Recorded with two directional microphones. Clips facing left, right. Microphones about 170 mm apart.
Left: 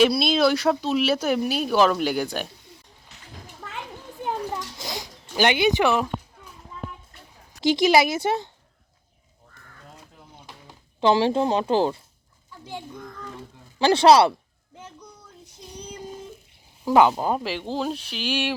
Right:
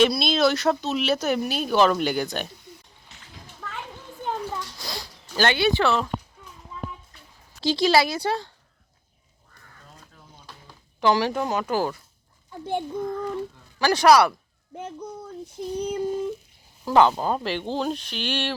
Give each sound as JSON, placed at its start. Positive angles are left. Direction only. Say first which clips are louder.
{"t": 0.0, "sound": "speech", "louder": "left 1 dB", "side_deg": 5}
{"t": 4.2, "sound": "children playing", "louder": "left 1 dB", "side_deg": 10}
{"t": 4.8, "sound": "speech", "louder": "left 2 dB", "side_deg": 20}
{"t": 7.6, "sound": "a woman's voice", "louder": "left 2 dB", "side_deg": 20}
{"t": 10.3, "sound": "a sound", "louder": "left 1 dB", "side_deg": 20}
{"t": 12.5, "sound": "a child's voice", "louder": "right 9 dB", "side_deg": -55}
{"t": 13.7, "sound": "a woman's voice", "louder": "left 2 dB", "side_deg": 25}
{"t": 14.8, "sound": "child singing", "louder": "right 10 dB", "side_deg": -55}
{"t": 16.8, "sound": "speech", "louder": "left 1 dB", "side_deg": 15}